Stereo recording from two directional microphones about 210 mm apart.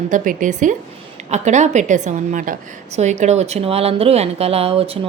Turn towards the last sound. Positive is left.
turn(degrees=-25)  # may be behind; listen again after turning